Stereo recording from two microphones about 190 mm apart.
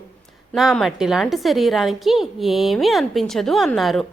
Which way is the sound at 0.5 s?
Centre (ahead or behind).